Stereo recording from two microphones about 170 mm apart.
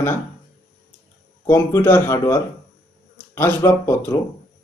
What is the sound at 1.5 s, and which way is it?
A man's voice, 15° left (ahead or behind).